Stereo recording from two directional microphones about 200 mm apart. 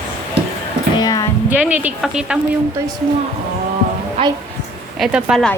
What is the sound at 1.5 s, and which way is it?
Speech, 10° right (ahead or behind).